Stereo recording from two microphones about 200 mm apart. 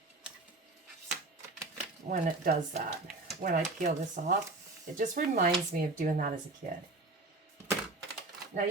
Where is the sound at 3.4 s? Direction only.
40° right (ahead or behind).